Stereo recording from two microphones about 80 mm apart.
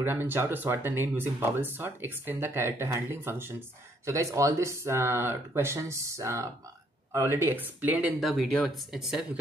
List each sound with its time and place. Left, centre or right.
0.0 s speech: right
4.0 s speech: right
8.2 s speech: centre
8.9 s speech: centre